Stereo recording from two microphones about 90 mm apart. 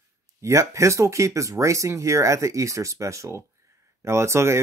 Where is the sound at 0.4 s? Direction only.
35° right (ahead or behind).